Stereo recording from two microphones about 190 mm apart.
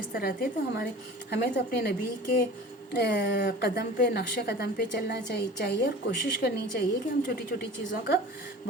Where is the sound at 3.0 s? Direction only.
60° left (ahead or behind).